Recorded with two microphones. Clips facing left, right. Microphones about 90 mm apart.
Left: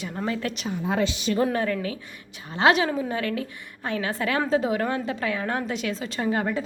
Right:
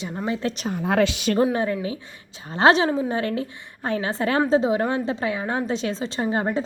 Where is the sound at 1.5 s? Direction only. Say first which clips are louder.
Right 2 dB; 25° right (ahead or behind).